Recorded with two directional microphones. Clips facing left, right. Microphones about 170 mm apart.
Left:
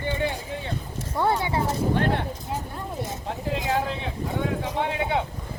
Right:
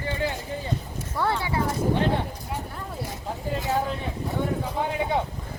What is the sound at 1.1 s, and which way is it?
Clip-clop, 20° left (ahead or behind).